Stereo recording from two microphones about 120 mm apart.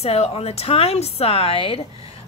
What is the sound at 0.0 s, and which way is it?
A woman's voice, 55° left (ahead or behind).